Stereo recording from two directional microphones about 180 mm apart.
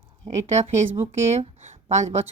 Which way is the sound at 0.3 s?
40° right (ahead or behind).